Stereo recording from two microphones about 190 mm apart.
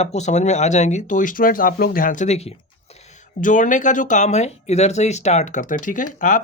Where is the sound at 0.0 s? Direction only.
35° left (ahead or behind).